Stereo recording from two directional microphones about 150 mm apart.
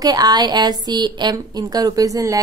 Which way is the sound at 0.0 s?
25° right (ahead or behind).